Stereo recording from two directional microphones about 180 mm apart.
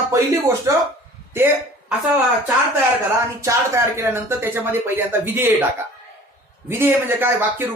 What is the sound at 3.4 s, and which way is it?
Speech, 15° right (ahead or behind).